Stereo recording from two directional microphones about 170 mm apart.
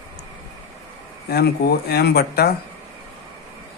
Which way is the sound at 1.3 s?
65° left (ahead or behind).